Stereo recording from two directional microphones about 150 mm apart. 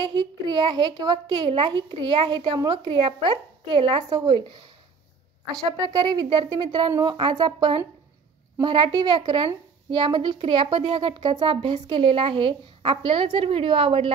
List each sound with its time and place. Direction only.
0.0 s a woman's voice: 30° right (ahead or behind)
5.7 s a woman's voice: 25° right (ahead or behind)